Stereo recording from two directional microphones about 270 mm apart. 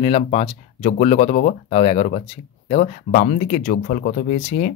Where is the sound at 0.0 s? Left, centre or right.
Left.